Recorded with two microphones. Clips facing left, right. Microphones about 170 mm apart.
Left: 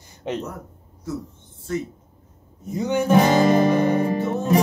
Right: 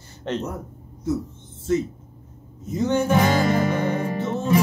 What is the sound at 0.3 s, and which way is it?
Music, 10° left (ahead or behind).